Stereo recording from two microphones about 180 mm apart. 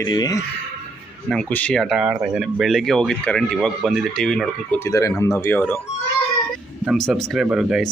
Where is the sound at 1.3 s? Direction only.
5° left (ahead or behind).